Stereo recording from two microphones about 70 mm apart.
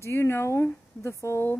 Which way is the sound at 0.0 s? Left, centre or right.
Left.